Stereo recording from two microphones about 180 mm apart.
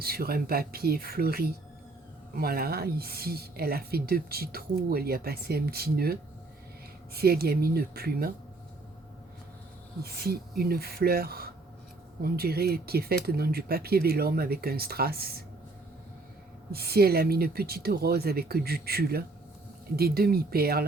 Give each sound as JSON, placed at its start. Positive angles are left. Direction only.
{"t": 0.0, "sound": "speech", "side_deg": -55}
{"t": 10.0, "sound": "speech", "side_deg": -60}
{"t": 16.7, "sound": "speech", "side_deg": -60}